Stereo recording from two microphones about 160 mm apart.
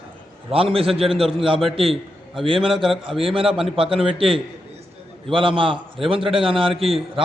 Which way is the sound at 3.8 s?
35° right (ahead or behind).